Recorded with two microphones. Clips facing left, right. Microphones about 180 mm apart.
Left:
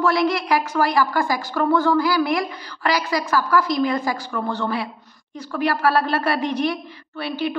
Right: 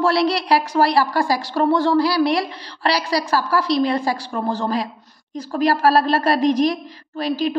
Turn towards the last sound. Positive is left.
turn(degrees=-35)  # may be behind; listen again after turning